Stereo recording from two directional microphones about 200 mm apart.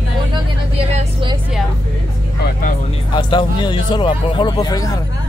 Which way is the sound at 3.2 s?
25° left (ahead or behind).